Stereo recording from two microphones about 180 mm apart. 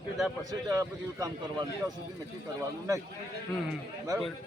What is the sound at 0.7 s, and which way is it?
Speech, 20° right (ahead or behind).